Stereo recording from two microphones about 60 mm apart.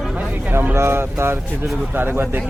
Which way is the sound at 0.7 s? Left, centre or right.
Right.